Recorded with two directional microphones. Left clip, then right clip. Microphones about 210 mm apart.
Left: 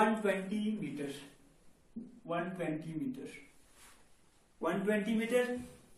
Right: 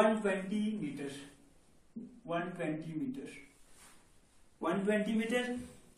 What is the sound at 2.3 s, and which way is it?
A man's voice, 10° right (ahead or behind).